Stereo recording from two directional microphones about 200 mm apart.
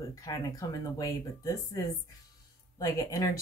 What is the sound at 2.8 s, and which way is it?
Speech, 15° left (ahead or behind).